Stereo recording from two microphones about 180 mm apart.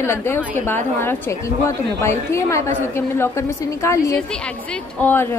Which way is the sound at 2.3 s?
15° left (ahead or behind).